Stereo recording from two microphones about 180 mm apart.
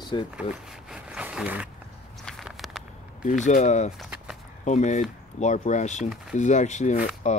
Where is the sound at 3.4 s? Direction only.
40° left (ahead or behind).